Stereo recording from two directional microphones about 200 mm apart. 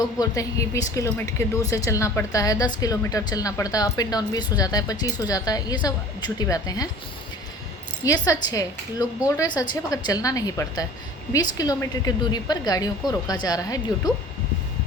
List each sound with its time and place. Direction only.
0.2 s a woman's voice: 15° left (ahead or behind)
8.0 s a woman's voice: 15° left (ahead or behind)